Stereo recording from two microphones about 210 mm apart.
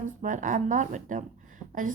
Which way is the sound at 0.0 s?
35° right (ahead or behind).